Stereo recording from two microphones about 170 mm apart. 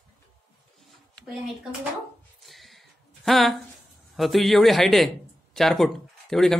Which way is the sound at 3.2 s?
Centre (ahead or behind).